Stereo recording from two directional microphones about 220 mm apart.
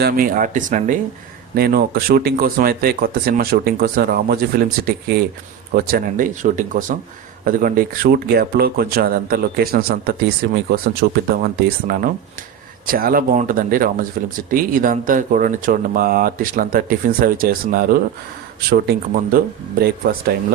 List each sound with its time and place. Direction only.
0.0 s speech: 40° right (ahead or behind)